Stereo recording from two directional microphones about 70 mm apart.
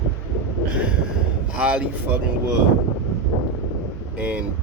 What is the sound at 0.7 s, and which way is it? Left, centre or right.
Speech, centre.